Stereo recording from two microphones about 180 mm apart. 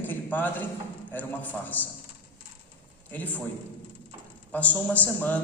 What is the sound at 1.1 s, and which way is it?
Speech, 10° left (ahead or behind).